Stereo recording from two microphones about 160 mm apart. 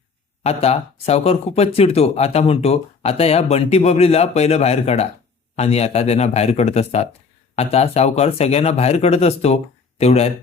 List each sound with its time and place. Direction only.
0.4 s speech: 40° left (ahead or behind)